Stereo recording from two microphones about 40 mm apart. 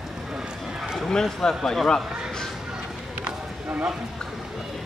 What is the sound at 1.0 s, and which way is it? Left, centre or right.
A man's voice, centre.